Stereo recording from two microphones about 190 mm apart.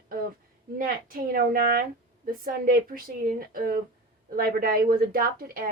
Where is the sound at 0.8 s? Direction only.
45° right (ahead or behind).